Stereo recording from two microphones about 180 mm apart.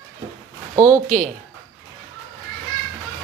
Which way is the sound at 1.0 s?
40° right (ahead or behind).